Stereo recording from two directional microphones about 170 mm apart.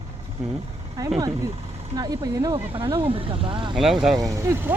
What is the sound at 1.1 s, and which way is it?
Speech, 20° right (ahead or behind).